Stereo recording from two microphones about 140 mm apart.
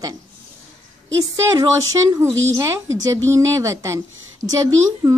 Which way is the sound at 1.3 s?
25° right (ahead or behind).